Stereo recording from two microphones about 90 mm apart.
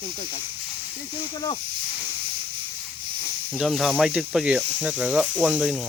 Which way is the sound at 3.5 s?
Centre (ahead or behind).